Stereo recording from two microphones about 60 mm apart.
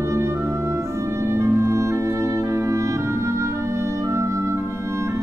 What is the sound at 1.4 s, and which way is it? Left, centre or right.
Clarinet, right.